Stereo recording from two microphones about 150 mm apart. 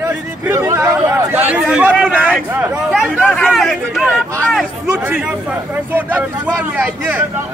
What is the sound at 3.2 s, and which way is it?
Speech, 10° left (ahead or behind).